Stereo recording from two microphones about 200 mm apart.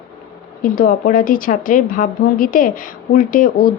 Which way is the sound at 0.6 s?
40° left (ahead or behind).